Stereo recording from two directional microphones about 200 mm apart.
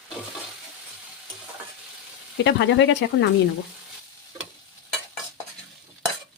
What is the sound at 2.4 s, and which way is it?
Speech, 65° left (ahead or behind).